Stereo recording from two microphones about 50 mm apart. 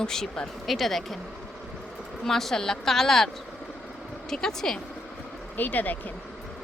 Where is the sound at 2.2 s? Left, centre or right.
Centre.